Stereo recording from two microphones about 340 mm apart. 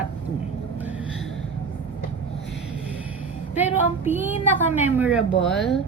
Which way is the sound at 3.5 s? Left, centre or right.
Centre.